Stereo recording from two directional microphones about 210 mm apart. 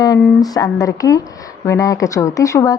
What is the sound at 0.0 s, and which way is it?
Speech, 15° left (ahead or behind).